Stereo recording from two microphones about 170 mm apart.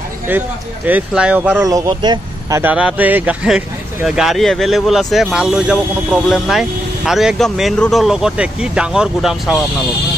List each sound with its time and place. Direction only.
0.3 s speech: 10° right (ahead or behind)
1.6 s speech: 25° right (ahead or behind)
2.6 s speech: 10° right (ahead or behind)